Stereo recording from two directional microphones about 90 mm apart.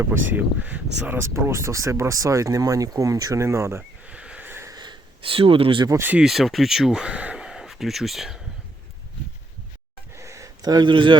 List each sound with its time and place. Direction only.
0.0 s speech: 25° right (ahead or behind)
4.0 s neigh: 10° right (ahead or behind)
4.4 s a sound: 25° right (ahead or behind)
4.7 s wheeze: 55° right (ahead or behind)
5.2 s speech: 90° right
5.9 s speech: 25° right (ahead or behind)
6.1 s speech: 5° right (ahead or behind)
10.2 s a sound: 35° right (ahead or behind); by 11.2 s 60° right (ahead or behind)